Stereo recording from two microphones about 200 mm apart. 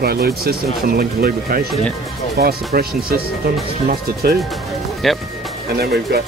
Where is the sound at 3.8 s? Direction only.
50° right (ahead or behind).